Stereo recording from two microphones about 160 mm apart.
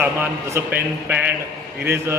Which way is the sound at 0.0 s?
10° right (ahead or behind).